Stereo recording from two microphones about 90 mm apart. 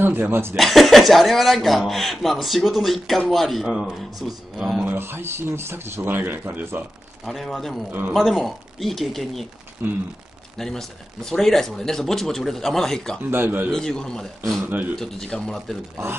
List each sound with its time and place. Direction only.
0.0 s speech: 25° right (ahead or behind)
0.6 s speech: centre (ahead or behind)
4.8 s speech: 25° right (ahead or behind)
7.2 s speech: centre (ahead or behind)
9.8 s speech: 25° right (ahead or behind)
10.6 s speech: 5° left (ahead or behind)
13.2 s speech: 25° right (ahead or behind)
13.7 s a man's voice: 5° left (ahead or behind)